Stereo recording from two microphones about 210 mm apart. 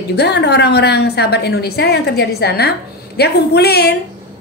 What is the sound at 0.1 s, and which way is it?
A woman's voice, 55° left (ahead or behind).